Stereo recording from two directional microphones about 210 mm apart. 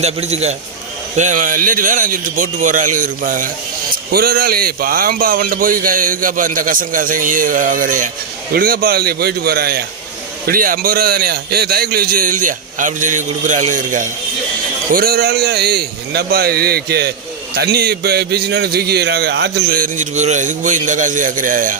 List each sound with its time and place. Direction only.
0.0 s a man's voice: 30° right (ahead or behind)